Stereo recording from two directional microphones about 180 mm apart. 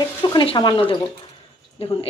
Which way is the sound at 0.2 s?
25° left (ahead or behind).